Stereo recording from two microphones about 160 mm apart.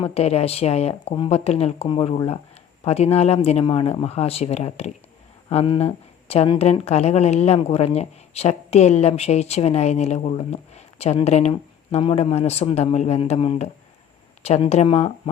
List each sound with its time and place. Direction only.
0.0 s a woman's voice: 40° left (ahead or behind)